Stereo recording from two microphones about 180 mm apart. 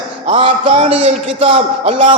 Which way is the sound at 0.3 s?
30° right (ahead or behind).